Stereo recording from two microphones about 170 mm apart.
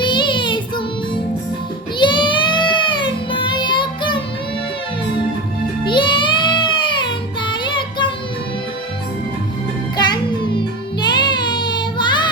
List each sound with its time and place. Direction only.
0.0 s child singing: 25° left (ahead or behind)
2.0 s child singing: 30° left (ahead or behind)
5.8 s music: 30° left (ahead or behind)
10.0 s music: 25° left (ahead or behind)
11.0 s child singing: 25° left (ahead or behind)